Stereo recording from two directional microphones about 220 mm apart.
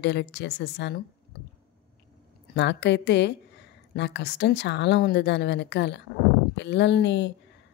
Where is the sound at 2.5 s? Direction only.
50° left (ahead or behind).